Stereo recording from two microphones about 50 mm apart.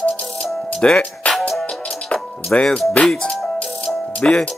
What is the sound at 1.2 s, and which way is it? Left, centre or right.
Music, left.